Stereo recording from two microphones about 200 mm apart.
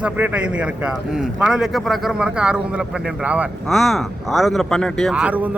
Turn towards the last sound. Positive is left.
turn(degrees=-5)  # may be behind; listen again after turning